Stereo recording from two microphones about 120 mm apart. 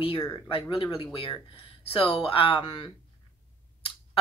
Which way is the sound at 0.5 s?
45° left (ahead or behind).